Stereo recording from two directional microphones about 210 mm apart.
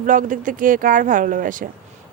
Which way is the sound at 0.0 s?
40° right (ahead or behind).